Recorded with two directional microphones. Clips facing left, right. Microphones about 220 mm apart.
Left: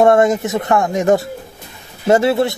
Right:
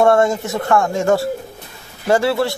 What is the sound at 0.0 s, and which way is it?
Speech, 20° left (ahead or behind).